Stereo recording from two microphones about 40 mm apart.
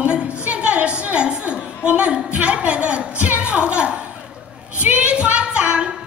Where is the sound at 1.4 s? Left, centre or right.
Right.